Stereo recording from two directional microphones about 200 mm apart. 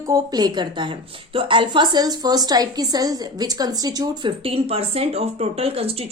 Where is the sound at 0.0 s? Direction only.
20° right (ahead or behind).